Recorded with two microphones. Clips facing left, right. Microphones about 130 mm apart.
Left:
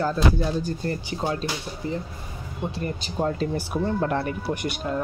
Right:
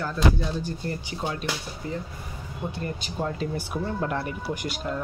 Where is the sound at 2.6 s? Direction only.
20° left (ahead or behind).